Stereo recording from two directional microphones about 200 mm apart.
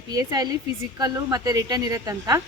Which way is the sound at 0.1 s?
20° right (ahead or behind).